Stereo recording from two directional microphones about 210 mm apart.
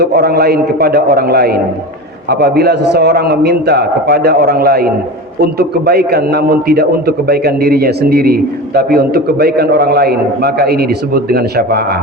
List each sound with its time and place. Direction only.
0.0 s a man's voice: 50° right (ahead or behind)